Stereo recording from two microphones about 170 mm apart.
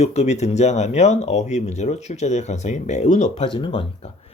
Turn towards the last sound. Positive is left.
turn(degrees=30)  # may be behind; listen again after turning